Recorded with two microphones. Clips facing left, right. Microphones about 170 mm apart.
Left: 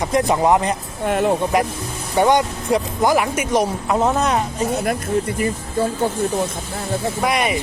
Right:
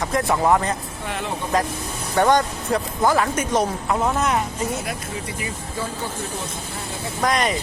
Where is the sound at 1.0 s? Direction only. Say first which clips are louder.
Left 11 dB; 50° left (ahead or behind).